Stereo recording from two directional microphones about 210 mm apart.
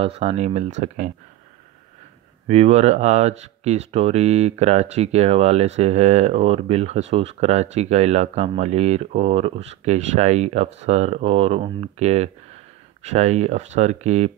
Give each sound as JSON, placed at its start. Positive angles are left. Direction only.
{"t": 0.0, "sound": "speech", "side_deg": -30}
{"t": 2.4, "sound": "speech", "side_deg": -30}